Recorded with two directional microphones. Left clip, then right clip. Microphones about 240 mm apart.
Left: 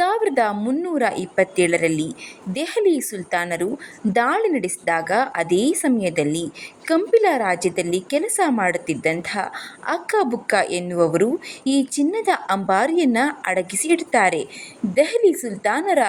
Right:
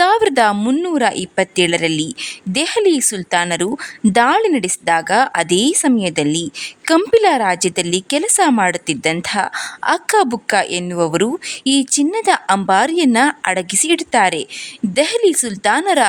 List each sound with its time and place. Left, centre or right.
0.0 s a woman's voice: right